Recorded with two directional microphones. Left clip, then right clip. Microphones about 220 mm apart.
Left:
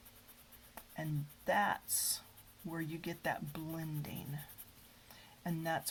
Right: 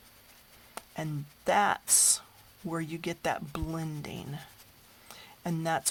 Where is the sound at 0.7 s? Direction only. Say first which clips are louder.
Right 7 dB; 55° right (ahead or behind).